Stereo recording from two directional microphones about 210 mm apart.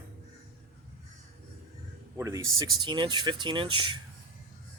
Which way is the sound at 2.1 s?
15° right (ahead or behind).